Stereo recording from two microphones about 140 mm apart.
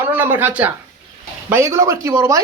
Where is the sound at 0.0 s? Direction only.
15° right (ahead or behind).